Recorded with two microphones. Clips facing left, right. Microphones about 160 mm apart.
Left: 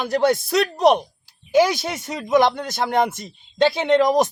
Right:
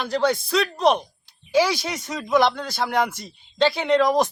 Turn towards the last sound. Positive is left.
turn(degrees=20)  # may be behind; listen again after turning